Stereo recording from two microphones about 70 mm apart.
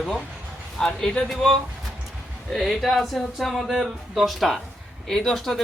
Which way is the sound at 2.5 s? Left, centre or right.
Centre.